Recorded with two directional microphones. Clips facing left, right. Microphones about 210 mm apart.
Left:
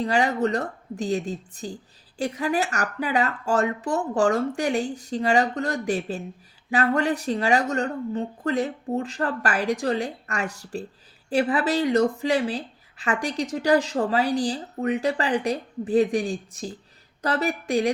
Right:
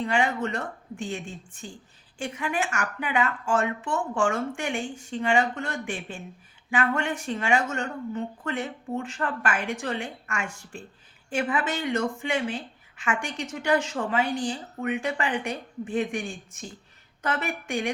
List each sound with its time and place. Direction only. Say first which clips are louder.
0.0 s a woman's voice: left 4 dB; 35° left (ahead or behind)